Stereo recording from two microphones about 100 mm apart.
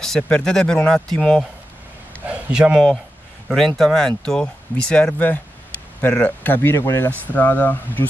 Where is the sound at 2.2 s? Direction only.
15° right (ahead or behind).